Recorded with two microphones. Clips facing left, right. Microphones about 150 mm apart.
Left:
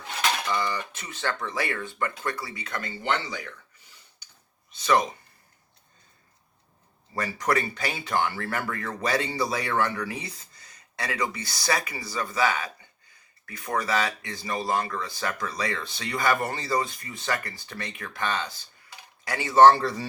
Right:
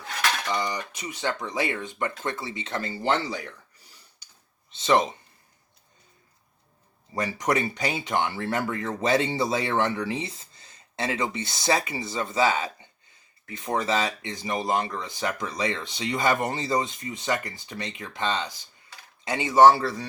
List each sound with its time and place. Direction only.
0.4 s speech: 15° right (ahead or behind)
7.1 s a man's voice: 20° right (ahead or behind); by 20.1 s centre (ahead or behind)